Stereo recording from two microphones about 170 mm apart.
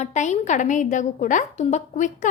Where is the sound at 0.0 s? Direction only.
45° left (ahead or behind).